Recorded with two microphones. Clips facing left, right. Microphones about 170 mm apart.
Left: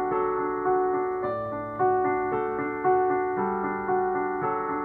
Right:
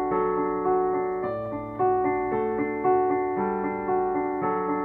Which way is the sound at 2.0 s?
15° right (ahead or behind).